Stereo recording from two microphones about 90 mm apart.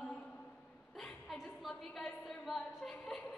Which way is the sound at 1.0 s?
Centre (ahead or behind).